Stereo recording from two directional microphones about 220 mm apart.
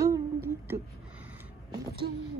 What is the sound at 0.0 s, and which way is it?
Humming, 15° right (ahead or behind).